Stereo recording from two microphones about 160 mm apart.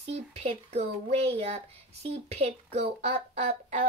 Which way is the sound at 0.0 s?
40° right (ahead or behind).